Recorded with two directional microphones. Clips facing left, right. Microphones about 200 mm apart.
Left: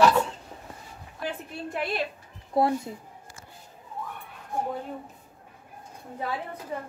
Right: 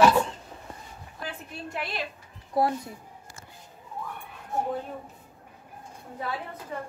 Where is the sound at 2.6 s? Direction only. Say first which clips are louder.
Left 2 dB; 25° left (ahead or behind).